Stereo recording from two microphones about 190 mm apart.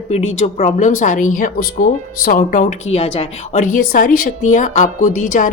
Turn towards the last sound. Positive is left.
turn(degrees=45)  # may be behind; listen again after turning